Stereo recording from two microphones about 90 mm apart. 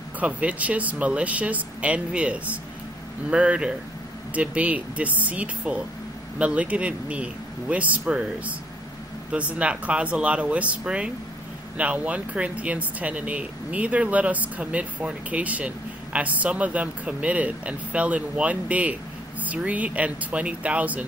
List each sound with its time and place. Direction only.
0.2 s speech: 15° right (ahead or behind)